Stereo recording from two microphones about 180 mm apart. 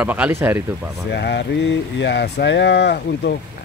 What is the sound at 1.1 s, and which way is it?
Speech, 70° left (ahead or behind).